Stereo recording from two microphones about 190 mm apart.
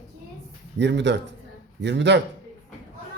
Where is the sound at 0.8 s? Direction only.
65° right (ahead or behind).